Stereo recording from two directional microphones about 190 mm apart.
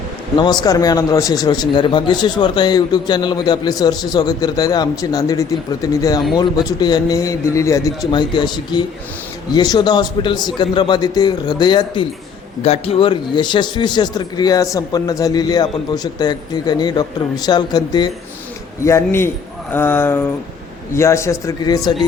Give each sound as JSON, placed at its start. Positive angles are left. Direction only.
{"t": 0.3, "sound": "a man's voice", "side_deg": 20}